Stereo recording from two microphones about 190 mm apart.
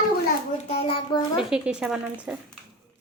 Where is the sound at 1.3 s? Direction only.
5° right (ahead or behind).